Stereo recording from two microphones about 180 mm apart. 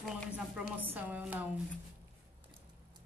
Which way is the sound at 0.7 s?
10° right (ahead or behind).